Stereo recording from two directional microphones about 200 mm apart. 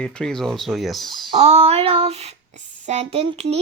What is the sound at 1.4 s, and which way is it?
Child singing, 30° right (ahead or behind).